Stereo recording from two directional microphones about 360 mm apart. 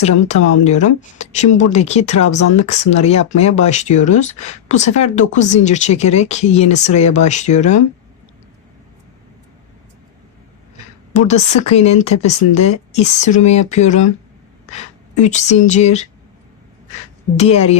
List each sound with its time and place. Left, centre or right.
0.6 s speech: centre
11.1 s speech: centre
15.1 s speech: centre
17.3 s speech: centre